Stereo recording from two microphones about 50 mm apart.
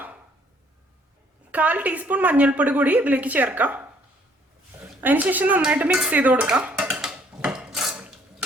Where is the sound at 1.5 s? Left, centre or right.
Right.